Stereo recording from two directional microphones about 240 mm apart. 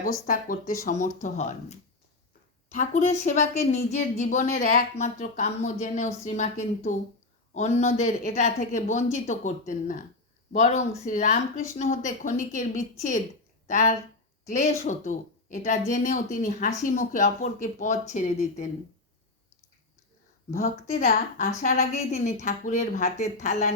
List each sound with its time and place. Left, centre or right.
0.0 s a woman's voice: left
20.5 s speech: left